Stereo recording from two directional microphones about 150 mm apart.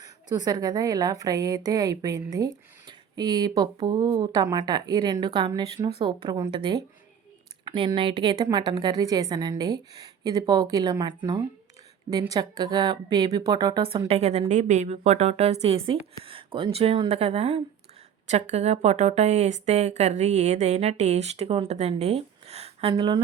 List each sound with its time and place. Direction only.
0.0 s speech: 25° right (ahead or behind)
14.1 s a woman's voice: 45° right (ahead or behind)